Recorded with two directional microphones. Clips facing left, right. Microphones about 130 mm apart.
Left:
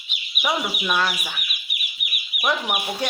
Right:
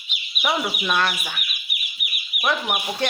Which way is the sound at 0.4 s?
10° left (ahead or behind).